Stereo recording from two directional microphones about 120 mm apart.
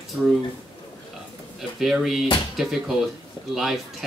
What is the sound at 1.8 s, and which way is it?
Speech, 5° right (ahead or behind).